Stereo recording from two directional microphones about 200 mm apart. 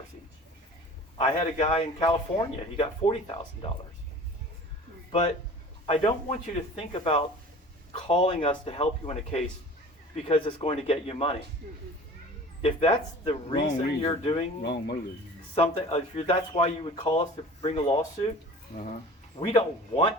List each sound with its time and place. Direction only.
1.2 s speech: 30° left (ahead or behind)
5.8 s speech: 30° left (ahead or behind)
11.6 s speech: 45° right (ahead or behind)
12.6 s speech: 30° left (ahead or behind)
14.6 s speech: 55° left (ahead or behind)
15.5 s speech: 30° left (ahead or behind)
19.4 s speech: 25° left (ahead or behind)